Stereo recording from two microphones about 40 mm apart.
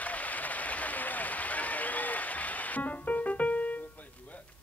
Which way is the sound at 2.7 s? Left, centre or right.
Left.